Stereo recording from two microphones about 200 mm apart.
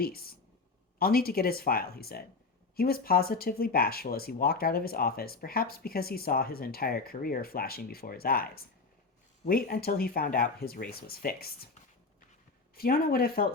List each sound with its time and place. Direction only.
0.0 s speech: 50° left (ahead or behind)
12.7 s speech: 50° left (ahead or behind)